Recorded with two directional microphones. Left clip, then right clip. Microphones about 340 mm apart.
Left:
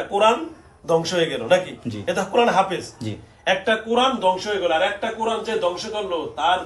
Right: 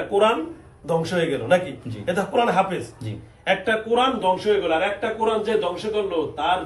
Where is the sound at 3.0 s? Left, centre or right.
Left.